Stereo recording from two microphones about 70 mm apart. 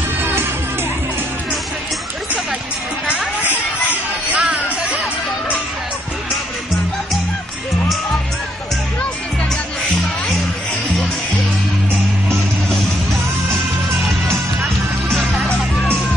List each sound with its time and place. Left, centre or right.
4.3 s music: centre